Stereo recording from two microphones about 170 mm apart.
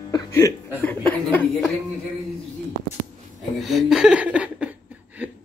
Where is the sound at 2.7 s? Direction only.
45° right (ahead or behind).